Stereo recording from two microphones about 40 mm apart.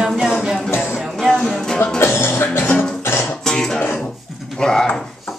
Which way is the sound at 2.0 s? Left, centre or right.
Left.